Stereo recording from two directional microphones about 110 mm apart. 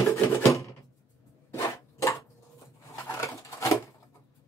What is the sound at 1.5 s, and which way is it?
Zipper, 30° left (ahead or behind).